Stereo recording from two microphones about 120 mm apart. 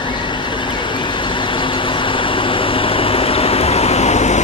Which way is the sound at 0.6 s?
40° left (ahead or behind).